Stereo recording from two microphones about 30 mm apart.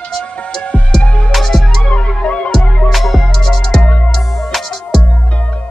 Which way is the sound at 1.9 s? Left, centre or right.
Left.